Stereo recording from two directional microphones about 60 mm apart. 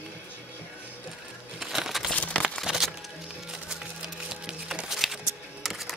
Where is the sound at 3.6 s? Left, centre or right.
Centre.